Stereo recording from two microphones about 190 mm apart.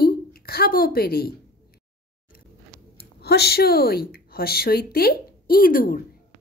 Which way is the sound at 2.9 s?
60° left (ahead or behind).